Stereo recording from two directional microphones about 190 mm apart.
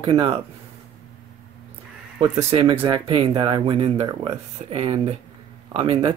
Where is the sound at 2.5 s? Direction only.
30° right (ahead or behind).